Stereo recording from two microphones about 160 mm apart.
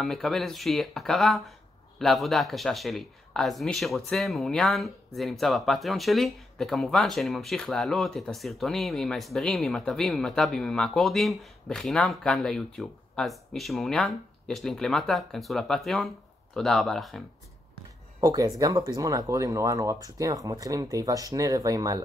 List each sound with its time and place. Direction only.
0.0 s speech: centre (ahead or behind)
18.2 s speech: 20° right (ahead or behind)